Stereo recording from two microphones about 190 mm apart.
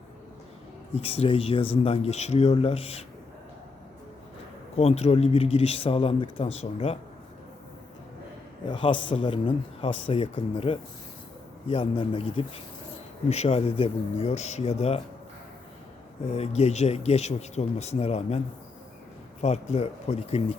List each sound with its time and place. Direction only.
1.0 s speech: 30° left (ahead or behind)
4.8 s speech: 35° left (ahead or behind)
8.7 s a man's voice: 25° left (ahead or behind)
16.3 s speech: 35° left (ahead or behind)